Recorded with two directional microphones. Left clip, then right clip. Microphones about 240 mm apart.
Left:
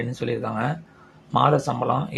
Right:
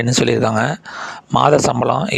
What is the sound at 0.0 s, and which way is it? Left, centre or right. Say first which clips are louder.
Speech: right 12 dB; right.